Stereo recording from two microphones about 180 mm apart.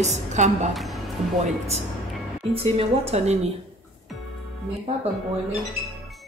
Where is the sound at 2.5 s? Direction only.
30° right (ahead or behind).